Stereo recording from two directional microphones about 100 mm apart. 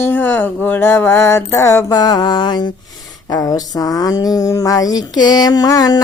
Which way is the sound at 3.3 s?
35° left (ahead or behind).